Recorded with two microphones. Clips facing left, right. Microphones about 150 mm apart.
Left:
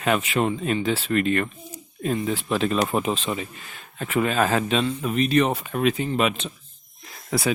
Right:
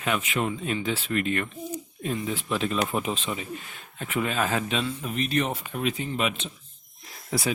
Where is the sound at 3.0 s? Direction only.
90° left.